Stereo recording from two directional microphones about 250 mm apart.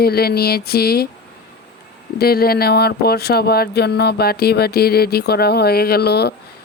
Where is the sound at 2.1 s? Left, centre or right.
Left.